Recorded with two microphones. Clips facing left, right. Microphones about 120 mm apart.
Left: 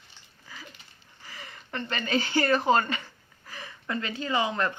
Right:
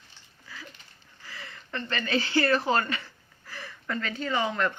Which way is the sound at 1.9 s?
40° left (ahead or behind).